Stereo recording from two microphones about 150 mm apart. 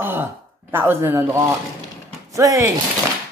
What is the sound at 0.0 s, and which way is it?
Speech, 15° right (ahead or behind).